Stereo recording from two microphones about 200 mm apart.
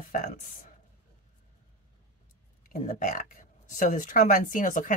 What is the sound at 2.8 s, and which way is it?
Speech, 40° left (ahead or behind).